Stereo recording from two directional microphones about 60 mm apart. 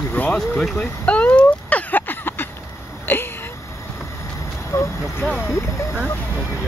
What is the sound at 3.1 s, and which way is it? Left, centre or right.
Vehicle, left.